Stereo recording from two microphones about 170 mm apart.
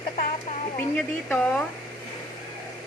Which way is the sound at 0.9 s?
5° left (ahead or behind).